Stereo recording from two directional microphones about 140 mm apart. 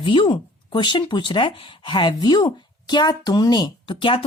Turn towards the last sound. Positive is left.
turn(degrees=40)  # may be behind; listen again after turning